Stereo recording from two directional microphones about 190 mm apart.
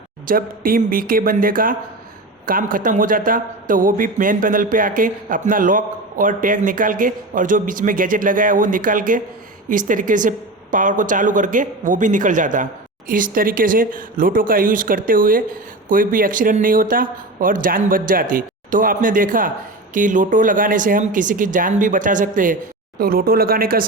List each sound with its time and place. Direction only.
0.3 s speech: 50° right (ahead or behind)